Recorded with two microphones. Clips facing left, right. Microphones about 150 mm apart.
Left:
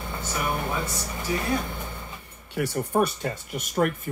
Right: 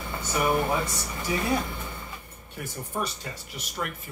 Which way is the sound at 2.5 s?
75° left (ahead or behind).